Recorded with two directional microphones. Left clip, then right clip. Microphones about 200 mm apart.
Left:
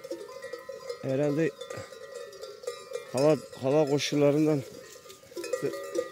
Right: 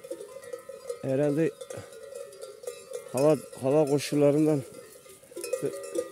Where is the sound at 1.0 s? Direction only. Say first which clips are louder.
Right 2 dB; 20° right (ahead or behind).